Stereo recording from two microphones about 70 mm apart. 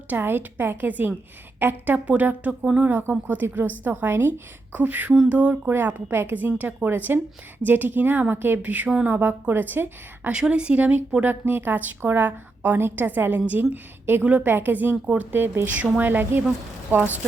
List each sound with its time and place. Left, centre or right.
0.1 s a woman's voice: right; by 2.9 s centre
2.9 s a woman's voice: right
5.7 s a woman's voice: right
10.3 s a woman's voice: centre